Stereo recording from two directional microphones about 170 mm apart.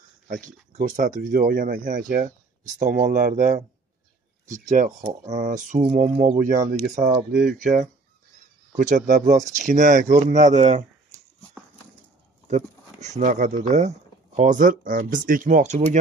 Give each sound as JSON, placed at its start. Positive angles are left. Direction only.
{"t": 0.3, "sound": "speech", "side_deg": -50}
{"t": 6.4, "sound": "speech", "side_deg": -50}
{"t": 12.4, "sound": "speech", "side_deg": -40}